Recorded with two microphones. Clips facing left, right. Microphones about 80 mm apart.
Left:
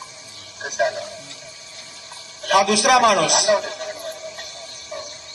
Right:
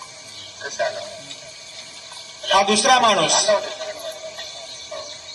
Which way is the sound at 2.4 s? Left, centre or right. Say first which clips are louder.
Even; left.